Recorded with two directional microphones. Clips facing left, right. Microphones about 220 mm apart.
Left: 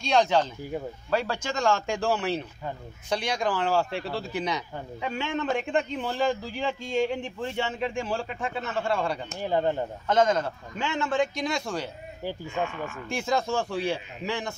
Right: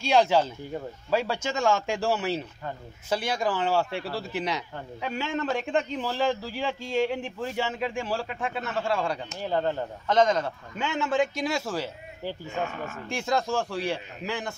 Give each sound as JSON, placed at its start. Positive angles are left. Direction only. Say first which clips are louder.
{"t": 0.0, "sound": "a man's voice", "louder": "right 1 dB", "side_deg": -5}
{"t": 9.4, "sound": "speech", "louder": "left 2 dB", "side_deg": 15}
{"t": 10.0, "sound": "a man's voice", "louder": "even", "side_deg": 0}
{"t": 12.4, "sound": "speech", "louder": "left 1 dB", "side_deg": -40}
{"t": 13.1, "sound": "a man's voice", "louder": "even", "side_deg": 0}